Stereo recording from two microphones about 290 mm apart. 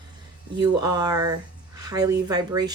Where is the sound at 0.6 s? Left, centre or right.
Centre.